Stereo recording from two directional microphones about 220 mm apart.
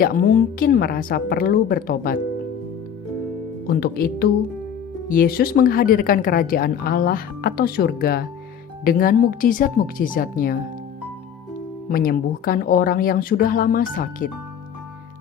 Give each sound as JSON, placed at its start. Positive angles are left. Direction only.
{"t": 0.0, "sound": "a woman's voice", "side_deg": 40}
{"t": 3.7, "sound": "a woman's voice", "side_deg": 45}
{"t": 11.9, "sound": "a woman's voice", "side_deg": 40}